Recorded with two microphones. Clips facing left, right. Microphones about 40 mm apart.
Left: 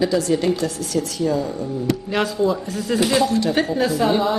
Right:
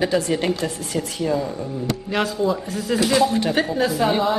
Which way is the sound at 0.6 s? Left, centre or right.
Centre.